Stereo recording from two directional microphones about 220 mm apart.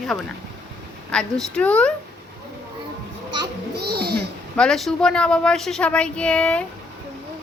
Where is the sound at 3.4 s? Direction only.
45° right (ahead or behind).